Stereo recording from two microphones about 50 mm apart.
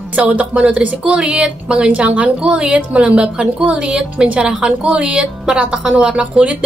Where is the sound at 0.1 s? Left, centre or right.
Right.